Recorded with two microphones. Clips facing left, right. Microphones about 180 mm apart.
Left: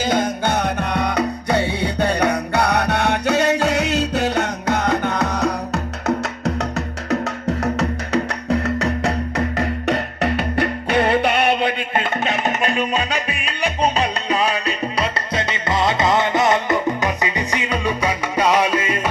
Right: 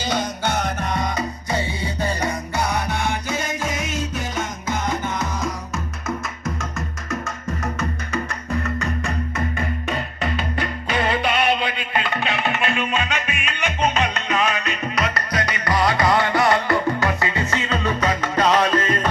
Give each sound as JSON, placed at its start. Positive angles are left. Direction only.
{"t": 0.0, "sound": "music", "side_deg": 50}
{"t": 11.9, "sound": "music", "side_deg": 45}